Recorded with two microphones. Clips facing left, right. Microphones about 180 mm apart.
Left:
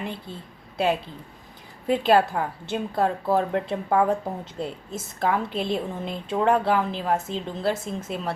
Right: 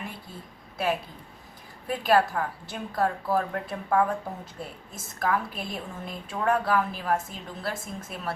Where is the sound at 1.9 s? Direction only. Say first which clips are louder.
Left 4 dB; 25° left (ahead or behind).